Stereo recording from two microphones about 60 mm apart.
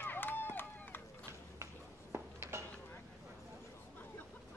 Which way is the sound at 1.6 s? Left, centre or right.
Right.